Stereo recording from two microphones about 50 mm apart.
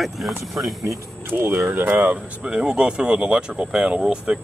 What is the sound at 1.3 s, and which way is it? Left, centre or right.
Speech, right.